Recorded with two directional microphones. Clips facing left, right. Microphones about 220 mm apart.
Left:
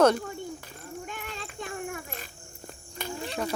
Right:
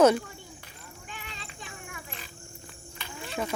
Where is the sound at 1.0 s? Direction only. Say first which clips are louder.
Left 6 dB; 50° left (ahead or behind).